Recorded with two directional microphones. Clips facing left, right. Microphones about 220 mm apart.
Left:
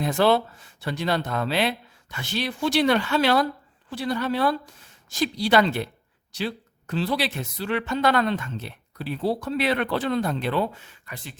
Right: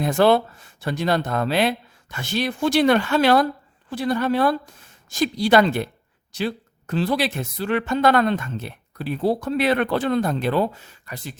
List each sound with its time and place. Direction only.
0.0 s speech: 50° right (ahead or behind)